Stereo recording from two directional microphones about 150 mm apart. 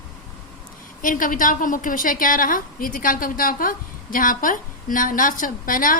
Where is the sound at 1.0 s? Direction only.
65° left (ahead or behind).